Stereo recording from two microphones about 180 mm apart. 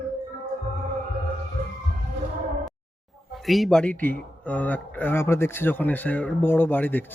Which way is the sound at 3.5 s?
Centre (ahead or behind).